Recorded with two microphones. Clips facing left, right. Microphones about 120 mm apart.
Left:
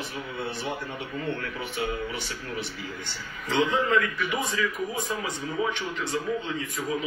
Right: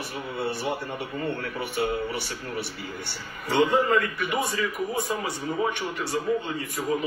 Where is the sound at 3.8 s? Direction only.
45° right (ahead or behind).